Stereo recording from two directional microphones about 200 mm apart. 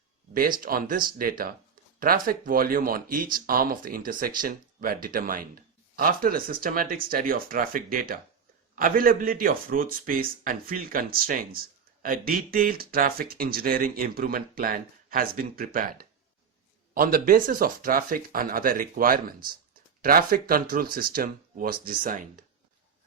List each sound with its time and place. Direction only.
0.6 s speech: 45° right (ahead or behind)